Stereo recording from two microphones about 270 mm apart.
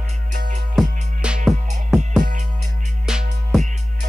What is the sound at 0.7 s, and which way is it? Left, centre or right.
Music, centre.